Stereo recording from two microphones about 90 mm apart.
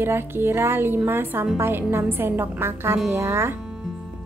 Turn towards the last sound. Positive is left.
turn(degrees=-25)  # may be behind; listen again after turning